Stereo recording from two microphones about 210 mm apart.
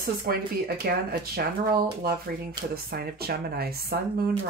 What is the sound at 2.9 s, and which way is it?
Speech, 45° right (ahead or behind).